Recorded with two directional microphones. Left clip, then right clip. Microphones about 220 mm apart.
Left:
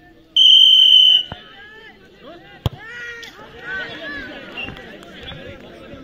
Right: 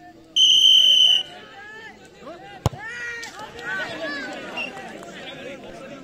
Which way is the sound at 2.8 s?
15° left (ahead or behind).